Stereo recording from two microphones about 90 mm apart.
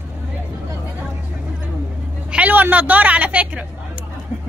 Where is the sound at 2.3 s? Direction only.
15° right (ahead or behind).